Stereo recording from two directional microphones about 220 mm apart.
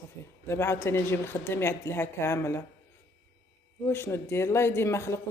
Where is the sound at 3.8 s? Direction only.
10° left (ahead or behind).